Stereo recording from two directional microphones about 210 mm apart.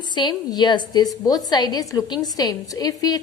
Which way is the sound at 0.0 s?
20° left (ahead or behind).